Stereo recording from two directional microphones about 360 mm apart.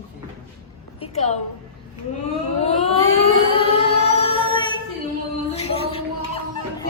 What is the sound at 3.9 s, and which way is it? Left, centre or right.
Music, centre.